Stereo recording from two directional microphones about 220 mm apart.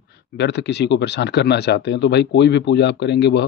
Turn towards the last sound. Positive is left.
turn(degrees=50)  # may be behind; listen again after turning